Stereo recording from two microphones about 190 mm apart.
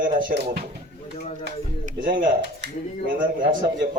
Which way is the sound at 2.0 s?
50° right (ahead or behind).